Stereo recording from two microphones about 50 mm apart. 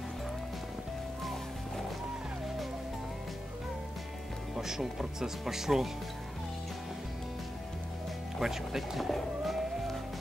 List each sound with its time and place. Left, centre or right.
4.6 s speech: centre
8.4 s speech: centre